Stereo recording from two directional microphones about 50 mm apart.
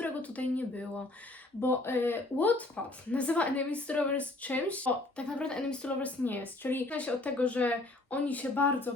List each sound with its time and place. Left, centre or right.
0.0 s a sound: left
1.6 s speech: left
6.8 s speech: left